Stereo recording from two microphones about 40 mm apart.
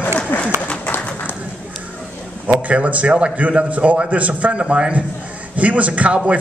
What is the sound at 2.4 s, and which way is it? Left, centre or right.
A man's voice, right.